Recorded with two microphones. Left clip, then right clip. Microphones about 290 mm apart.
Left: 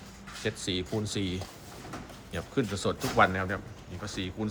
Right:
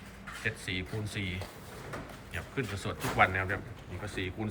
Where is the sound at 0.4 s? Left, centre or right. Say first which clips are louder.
Left 3 dB; centre.